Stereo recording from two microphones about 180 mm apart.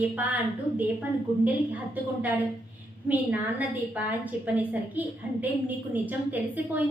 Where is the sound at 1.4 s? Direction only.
10° right (ahead or behind).